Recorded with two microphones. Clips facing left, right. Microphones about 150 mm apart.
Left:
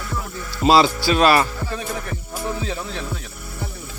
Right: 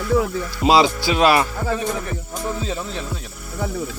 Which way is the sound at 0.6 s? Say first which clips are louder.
Even; 15° right (ahead or behind).